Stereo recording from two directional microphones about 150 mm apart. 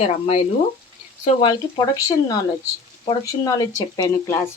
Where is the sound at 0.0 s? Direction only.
45° left (ahead or behind).